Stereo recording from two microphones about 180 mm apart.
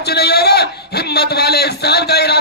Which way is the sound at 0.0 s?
65° left (ahead or behind).